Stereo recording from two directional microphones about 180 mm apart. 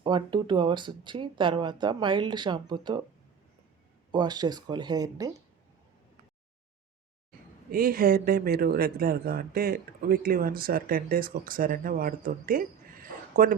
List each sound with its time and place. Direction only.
0.0 s speech: 25° right (ahead or behind)
4.1 s speech: 25° right (ahead or behind)
7.7 s speech: 50° right (ahead or behind)